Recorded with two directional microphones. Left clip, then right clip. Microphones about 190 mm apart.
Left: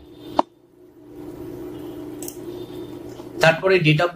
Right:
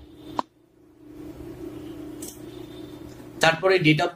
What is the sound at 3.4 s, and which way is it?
Speech, 30° right (ahead or behind).